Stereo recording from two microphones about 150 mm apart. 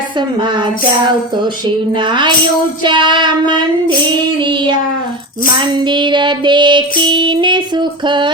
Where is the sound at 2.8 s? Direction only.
30° right (ahead or behind).